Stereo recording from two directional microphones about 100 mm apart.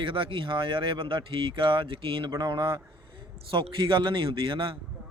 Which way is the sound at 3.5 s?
55° right (ahead or behind).